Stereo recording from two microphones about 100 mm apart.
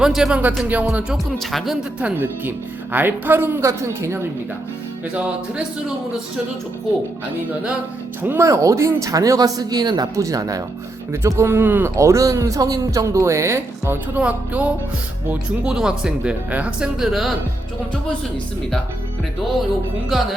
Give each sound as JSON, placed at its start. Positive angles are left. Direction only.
{"t": 0.0, "sound": "speech", "side_deg": -5}
{"t": 1.5, "sound": "speech", "side_deg": 0}
{"t": 2.0, "sound": "speech", "side_deg": -15}
{"t": 5.1, "sound": "speech", "side_deg": -10}
{"t": 8.2, "sound": "speech", "side_deg": -20}
{"t": 8.4, "sound": "speech", "side_deg": -30}
{"t": 11.9, "sound": "speech", "side_deg": -30}
{"t": 20.1, "sound": "speech", "side_deg": 0}